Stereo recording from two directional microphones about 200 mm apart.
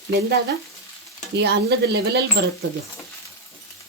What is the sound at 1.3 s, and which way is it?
Speech, 55° right (ahead or behind).